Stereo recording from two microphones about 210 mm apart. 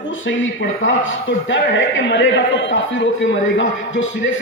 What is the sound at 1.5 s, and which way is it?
A man's voice, 65° left (ahead or behind).